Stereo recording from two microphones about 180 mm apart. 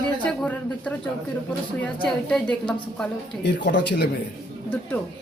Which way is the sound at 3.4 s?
80° left.